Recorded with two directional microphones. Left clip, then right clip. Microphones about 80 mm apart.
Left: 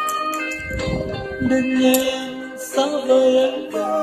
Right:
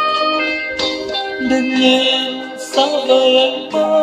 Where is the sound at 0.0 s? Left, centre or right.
Right.